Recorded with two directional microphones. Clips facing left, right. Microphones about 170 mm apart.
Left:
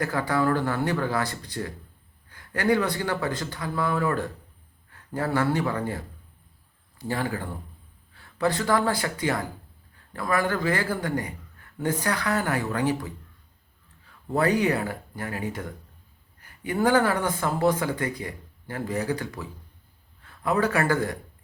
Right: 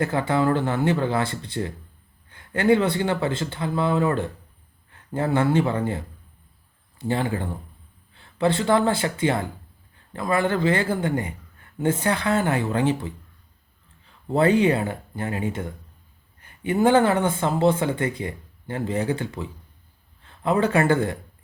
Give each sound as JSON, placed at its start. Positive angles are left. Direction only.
{"t": 0.0, "sound": "a man's voice", "side_deg": -25}
{"t": 14.3, "sound": "a man's voice", "side_deg": -25}